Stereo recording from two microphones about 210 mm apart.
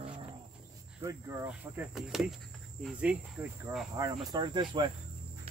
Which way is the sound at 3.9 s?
20° right (ahead or behind).